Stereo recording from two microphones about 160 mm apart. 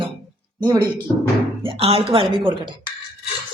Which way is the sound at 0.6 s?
20° right (ahead or behind).